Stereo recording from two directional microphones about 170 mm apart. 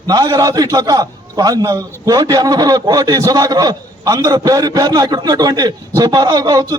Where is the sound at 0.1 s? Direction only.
20° right (ahead or behind).